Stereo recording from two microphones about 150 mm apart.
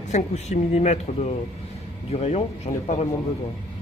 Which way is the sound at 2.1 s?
45° left (ahead or behind).